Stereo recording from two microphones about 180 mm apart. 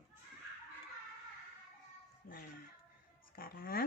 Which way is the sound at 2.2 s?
55° left (ahead or behind).